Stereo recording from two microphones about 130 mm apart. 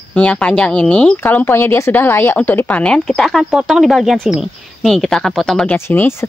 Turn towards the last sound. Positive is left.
turn(degrees=20)  # may be behind; listen again after turning